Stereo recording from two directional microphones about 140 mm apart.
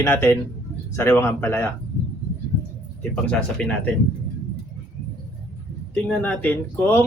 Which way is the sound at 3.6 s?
5° left (ahead or behind).